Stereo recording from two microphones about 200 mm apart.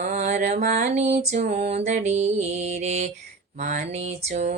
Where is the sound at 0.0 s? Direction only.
35° right (ahead or behind).